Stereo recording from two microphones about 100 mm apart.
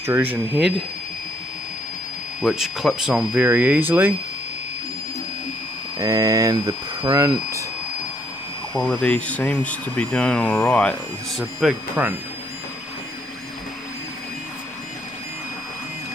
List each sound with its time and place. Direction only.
0.0 s speech: 20° right (ahead or behind)
0.6 s speech: 5° right (ahead or behind)
2.4 s speech: 5° right (ahead or behind)
5.9 s speech: 35° right (ahead or behind)
8.7 s speech: 10° left (ahead or behind)
11.6 s speech: 5° right (ahead or behind)